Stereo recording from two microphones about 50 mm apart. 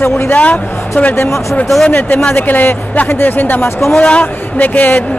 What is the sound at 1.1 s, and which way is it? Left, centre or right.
Speech, left.